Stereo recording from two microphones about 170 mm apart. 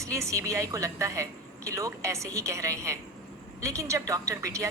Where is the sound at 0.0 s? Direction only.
20° right (ahead or behind).